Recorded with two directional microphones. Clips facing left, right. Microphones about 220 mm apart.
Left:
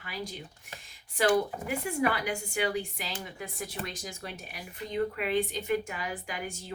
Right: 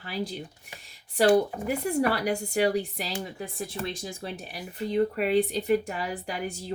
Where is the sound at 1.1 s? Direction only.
35° right (ahead or behind).